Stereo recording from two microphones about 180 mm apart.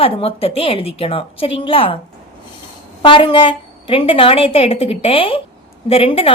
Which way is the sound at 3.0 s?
25° left (ahead or behind).